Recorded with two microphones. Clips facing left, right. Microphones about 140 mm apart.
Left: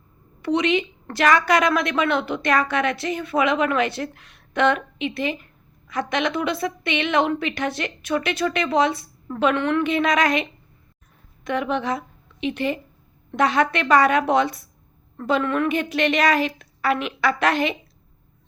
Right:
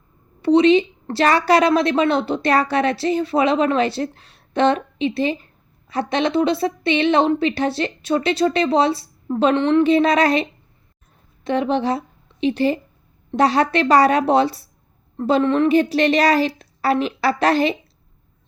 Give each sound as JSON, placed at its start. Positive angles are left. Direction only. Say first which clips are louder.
{"t": 0.4, "sound": "a woman's voice", "louder": "right 8 dB", "side_deg": -30}
{"t": 11.4, "sound": "a woman's voice", "louder": "right 4 dB", "side_deg": -30}